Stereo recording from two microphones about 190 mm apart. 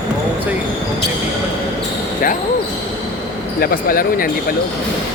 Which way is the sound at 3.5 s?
50° left (ahead or behind).